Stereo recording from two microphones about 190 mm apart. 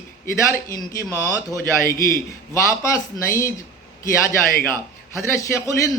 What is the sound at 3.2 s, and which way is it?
Speech, 15° left (ahead or behind).